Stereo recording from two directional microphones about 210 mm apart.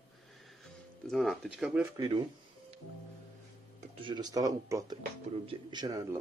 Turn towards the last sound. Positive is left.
turn(degrees=-15)  # may be behind; listen again after turning